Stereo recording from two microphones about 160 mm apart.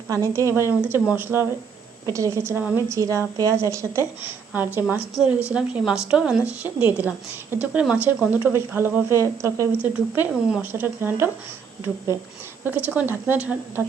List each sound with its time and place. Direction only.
0.1 s speech: 20° right (ahead or behind)
12.6 s speech: 10° right (ahead or behind)